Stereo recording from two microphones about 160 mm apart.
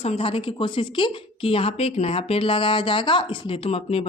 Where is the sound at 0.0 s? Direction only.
40° left (ahead or behind).